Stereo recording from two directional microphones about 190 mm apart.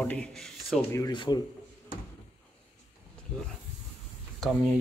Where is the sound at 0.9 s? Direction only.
20° left (ahead or behind).